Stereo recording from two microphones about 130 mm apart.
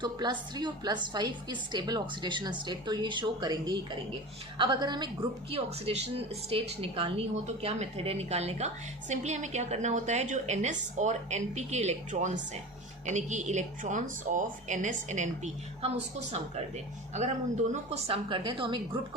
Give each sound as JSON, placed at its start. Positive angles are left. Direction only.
{"t": 0.0, "sound": "a woman's voice", "side_deg": -35}
{"t": 5.5, "sound": "a woman's voice", "side_deg": -50}
{"t": 15.8, "sound": "a woman's voice", "side_deg": -55}
{"t": 17.9, "sound": "a woman's voice", "side_deg": -45}